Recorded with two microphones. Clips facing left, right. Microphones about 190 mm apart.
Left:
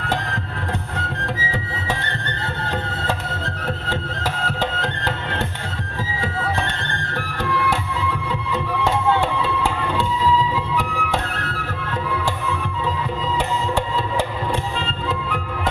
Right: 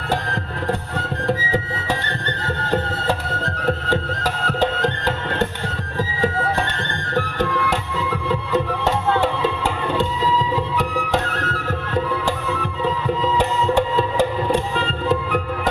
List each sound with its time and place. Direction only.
3.8 s music: 15° right (ahead or behind)
8.3 s music: 40° right (ahead or behind)
10.5 s music: 40° right (ahead or behind)